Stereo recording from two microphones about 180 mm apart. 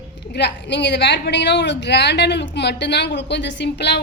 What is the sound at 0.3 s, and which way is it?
A woman's voice, 75° left (ahead or behind).